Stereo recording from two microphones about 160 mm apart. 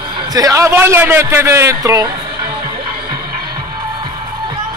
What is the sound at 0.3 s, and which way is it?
A man's voice, 20° right (ahead or behind).